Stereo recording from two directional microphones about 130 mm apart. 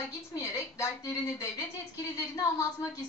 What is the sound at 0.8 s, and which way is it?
Speech, 25° left (ahead or behind).